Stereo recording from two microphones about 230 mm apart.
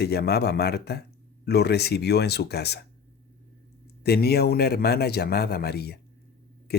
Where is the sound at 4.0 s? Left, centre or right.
Left.